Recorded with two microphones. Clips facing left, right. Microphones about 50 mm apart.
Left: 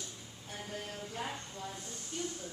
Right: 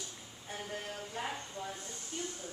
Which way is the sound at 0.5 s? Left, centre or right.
Centre.